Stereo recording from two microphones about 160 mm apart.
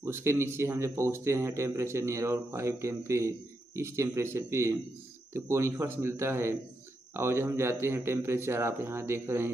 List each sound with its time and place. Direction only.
0.0 s speech: 15° right (ahead or behind)